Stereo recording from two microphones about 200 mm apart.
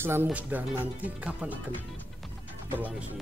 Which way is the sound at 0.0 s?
10° right (ahead or behind).